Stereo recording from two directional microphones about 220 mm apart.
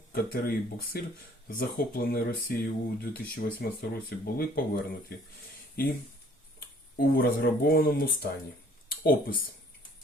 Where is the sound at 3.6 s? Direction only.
45° left (ahead or behind).